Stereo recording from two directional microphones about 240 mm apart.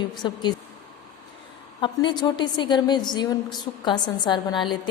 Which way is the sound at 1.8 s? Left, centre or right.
Centre.